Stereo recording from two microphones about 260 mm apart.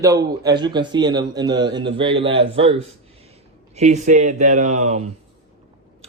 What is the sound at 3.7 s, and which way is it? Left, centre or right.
Speech, right.